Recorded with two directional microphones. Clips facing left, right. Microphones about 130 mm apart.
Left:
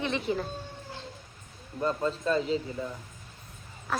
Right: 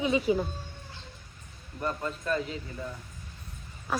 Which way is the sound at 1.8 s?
25° left (ahead or behind).